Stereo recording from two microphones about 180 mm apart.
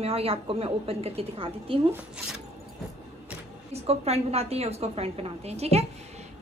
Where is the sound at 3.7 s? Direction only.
35° right (ahead or behind).